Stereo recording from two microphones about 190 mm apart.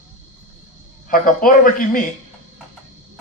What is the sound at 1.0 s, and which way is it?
Speech, 45° left (ahead or behind).